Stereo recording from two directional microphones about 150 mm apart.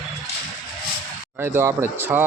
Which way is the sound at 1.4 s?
20° right (ahead or behind).